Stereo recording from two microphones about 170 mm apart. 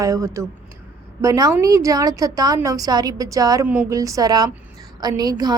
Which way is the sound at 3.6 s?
10° right (ahead or behind).